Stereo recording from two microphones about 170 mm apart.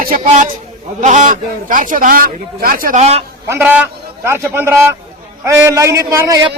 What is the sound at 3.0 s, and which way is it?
Speech, 35° right (ahead or behind).